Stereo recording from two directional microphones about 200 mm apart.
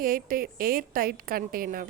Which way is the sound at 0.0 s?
45° right (ahead or behind).